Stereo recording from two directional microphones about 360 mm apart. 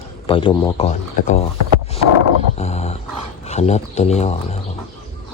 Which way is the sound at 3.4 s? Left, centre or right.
Centre.